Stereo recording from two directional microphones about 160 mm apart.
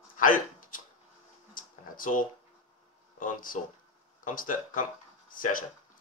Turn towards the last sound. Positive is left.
turn(degrees=60)  # may be behind; listen again after turning